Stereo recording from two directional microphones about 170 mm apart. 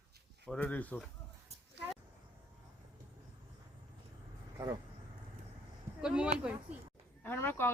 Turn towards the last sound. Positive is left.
turn(degrees=10)  # may be behind; listen again after turning